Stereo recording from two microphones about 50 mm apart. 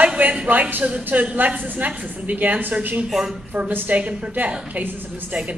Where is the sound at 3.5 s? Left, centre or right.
Right.